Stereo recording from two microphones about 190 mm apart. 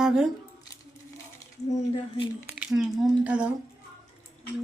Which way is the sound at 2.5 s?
Centre (ahead or behind).